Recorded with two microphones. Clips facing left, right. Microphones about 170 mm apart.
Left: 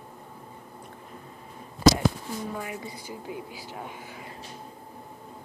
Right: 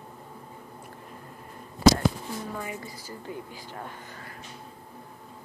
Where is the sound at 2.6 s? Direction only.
5° left (ahead or behind).